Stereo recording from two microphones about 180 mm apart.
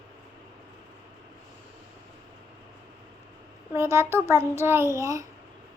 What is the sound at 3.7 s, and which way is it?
A child's voice, 15° right (ahead or behind).